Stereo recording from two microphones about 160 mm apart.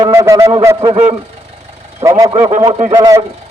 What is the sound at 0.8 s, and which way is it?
Speech, 35° right (ahead or behind).